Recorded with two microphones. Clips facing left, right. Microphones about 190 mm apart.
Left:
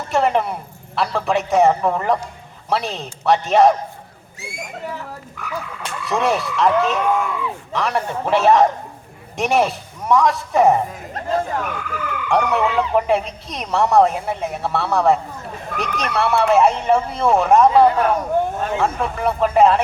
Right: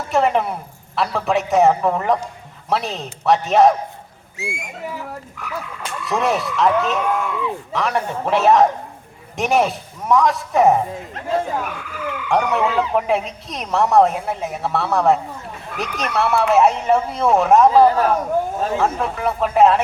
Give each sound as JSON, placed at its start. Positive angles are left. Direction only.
{"t": 0.1, "sound": "speech", "side_deg": 0}
{"t": 4.4, "sound": "speech", "side_deg": 35}
{"t": 5.5, "sound": "speech", "side_deg": 0}